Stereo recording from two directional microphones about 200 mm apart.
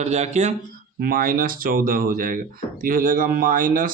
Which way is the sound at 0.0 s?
35° right (ahead or behind).